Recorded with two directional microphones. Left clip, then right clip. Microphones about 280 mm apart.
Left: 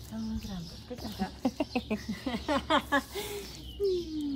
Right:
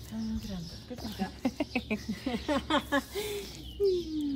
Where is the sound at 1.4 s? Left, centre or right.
Left.